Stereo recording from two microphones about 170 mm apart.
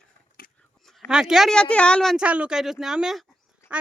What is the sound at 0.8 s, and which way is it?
Speech, centre (ahead or behind).